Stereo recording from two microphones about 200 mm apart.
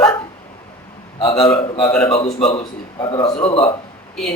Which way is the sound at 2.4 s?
30° left (ahead or behind).